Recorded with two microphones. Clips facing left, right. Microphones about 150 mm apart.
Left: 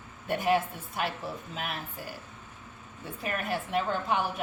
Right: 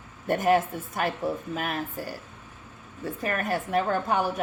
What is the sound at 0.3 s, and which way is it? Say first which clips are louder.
A woman's voice: right 4 dB; 45° right (ahead or behind).